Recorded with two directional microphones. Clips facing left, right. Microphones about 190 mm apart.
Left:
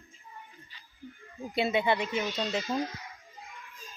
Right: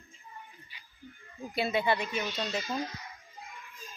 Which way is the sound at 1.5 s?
20° left (ahead or behind).